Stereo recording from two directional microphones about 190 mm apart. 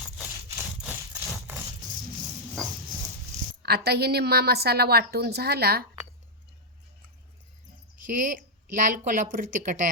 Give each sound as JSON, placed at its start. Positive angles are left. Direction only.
{"t": 0.8, "sound": "a sound", "side_deg": -5}
{"t": 3.6, "sound": "a woman's voice", "side_deg": -55}
{"t": 8.0, "sound": "a woman's voice", "side_deg": -45}